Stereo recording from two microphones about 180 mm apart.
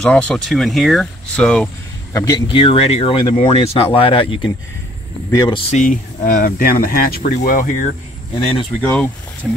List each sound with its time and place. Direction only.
0.0 s speech: 5° left (ahead or behind)
2.1 s speech: 20° left (ahead or behind)
5.7 s speech: 45° left (ahead or behind)
8.8 s speech: 10° left (ahead or behind)